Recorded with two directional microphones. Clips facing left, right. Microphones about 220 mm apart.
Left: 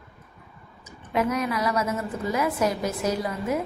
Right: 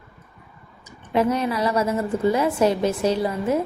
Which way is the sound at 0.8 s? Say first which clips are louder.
Right 4 dB; 30° right (ahead or behind).